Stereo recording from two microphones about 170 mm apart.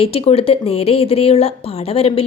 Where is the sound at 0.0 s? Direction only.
35° left (ahead or behind).